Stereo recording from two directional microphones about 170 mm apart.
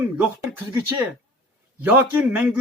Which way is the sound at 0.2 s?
15° right (ahead or behind).